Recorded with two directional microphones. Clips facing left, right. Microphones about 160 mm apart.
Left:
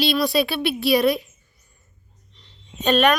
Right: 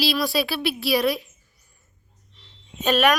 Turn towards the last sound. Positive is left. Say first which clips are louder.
# left 2 dB
turn(degrees=-5)  # may be behind; listen again after turning